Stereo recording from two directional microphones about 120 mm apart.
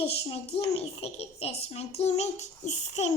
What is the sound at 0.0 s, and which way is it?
A child's voice, 55° left (ahead or behind).